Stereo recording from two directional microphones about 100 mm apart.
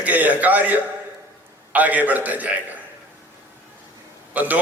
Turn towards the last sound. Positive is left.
turn(degrees=-15)  # may be behind; listen again after turning